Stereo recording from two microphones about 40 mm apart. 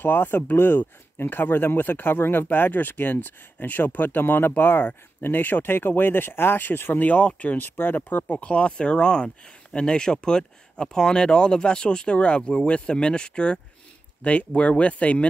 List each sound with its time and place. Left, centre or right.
0.0 s speech: left
2.5 s speech: left
7.0 s speech: left
7.5 s speech: left
8.4 s speech: left
14.2 s speech: left